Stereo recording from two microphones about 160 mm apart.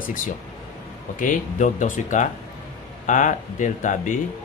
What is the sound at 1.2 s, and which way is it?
Speech, 55° left (ahead or behind).